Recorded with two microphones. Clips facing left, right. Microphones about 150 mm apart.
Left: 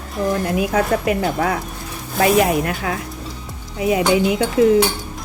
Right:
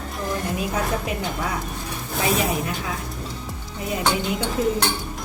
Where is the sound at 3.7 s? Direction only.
90° left.